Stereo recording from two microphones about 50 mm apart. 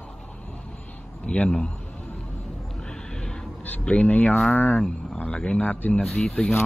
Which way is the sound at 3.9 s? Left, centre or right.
Left.